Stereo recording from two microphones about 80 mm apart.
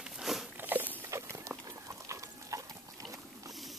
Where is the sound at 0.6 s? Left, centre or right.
Right.